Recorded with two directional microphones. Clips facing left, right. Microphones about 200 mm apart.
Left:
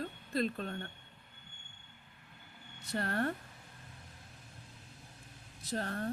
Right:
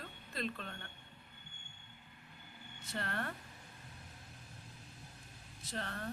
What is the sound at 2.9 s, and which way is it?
Speech, 40° left (ahead or behind).